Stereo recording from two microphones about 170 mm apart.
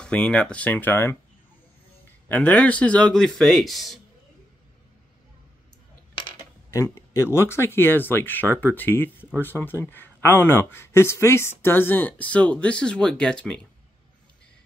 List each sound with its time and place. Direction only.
0.0 s speech: 5° left (ahead or behind)
2.2 s speech: 10° left (ahead or behind)
6.7 s a sound: 15° left (ahead or behind)
7.3 s speech: 15° left (ahead or behind)